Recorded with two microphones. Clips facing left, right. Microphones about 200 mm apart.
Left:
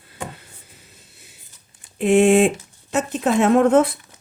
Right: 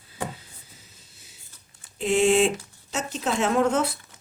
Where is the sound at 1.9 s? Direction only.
60° left (ahead or behind).